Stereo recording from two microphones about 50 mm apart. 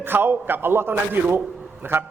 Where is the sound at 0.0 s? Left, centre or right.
Right.